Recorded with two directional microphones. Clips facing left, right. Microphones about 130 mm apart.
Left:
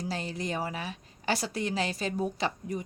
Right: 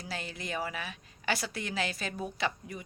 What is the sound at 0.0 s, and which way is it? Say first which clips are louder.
Speech: left 6 dB; 35° left (ahead or behind).